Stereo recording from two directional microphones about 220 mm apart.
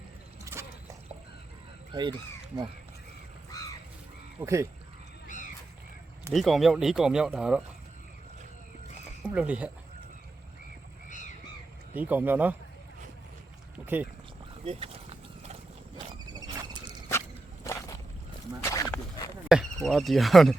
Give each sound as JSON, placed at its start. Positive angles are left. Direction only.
{"t": 0.4, "sound": "a sound", "side_deg": -15}
{"t": 1.9, "sound": "speech", "side_deg": -20}
{"t": 4.4, "sound": "speech", "side_deg": -15}
{"t": 6.3, "sound": "speech", "side_deg": 0}
{"t": 9.2, "sound": "speech", "side_deg": -5}
{"t": 11.9, "sound": "speech", "side_deg": -5}
{"t": 13.8, "sound": "speech", "side_deg": -10}
{"t": 14.6, "sound": "a sound", "side_deg": -25}
{"t": 17.1, "sound": "walk", "side_deg": 15}
{"t": 18.6, "sound": "dog", "side_deg": 15}
{"t": 19.5, "sound": "speech", "side_deg": 0}